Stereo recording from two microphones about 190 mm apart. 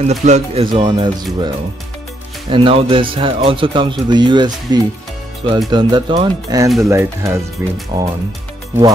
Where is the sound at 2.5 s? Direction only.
25° right (ahead or behind).